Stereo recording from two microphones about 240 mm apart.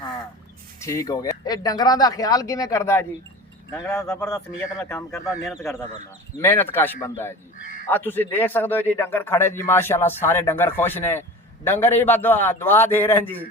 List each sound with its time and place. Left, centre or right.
0.8 s a man's voice: centre
6.4 s a man's voice: centre